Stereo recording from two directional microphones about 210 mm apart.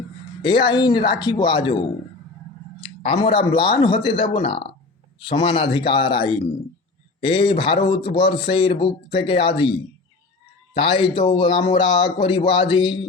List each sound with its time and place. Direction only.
0.4 s a man's voice: 20° left (ahead or behind)
10.8 s speech: 25° left (ahead or behind)